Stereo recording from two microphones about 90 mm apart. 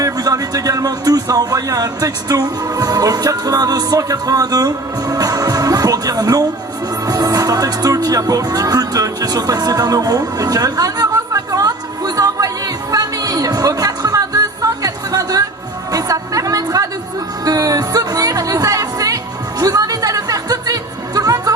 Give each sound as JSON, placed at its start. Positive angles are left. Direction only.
{"t": 0.0, "sound": "speech", "side_deg": -40}
{"t": 7.1, "sound": "music", "side_deg": -45}